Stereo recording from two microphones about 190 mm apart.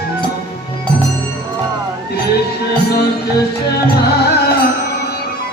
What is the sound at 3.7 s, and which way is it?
Music, 55° left (ahead or behind).